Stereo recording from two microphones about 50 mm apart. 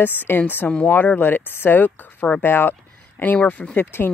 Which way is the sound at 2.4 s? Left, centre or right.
Left.